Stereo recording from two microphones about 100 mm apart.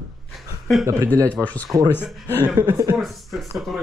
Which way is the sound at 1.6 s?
35° right (ahead or behind).